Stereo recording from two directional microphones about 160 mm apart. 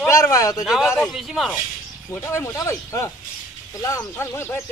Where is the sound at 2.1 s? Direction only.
15° left (ahead or behind).